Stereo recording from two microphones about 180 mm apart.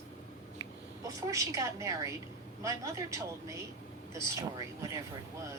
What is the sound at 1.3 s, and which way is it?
Speech, 15° right (ahead or behind).